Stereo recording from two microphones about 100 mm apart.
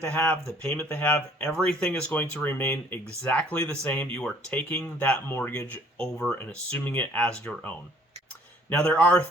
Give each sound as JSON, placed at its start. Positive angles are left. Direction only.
{"t": 0.0, "sound": "speech", "side_deg": 15}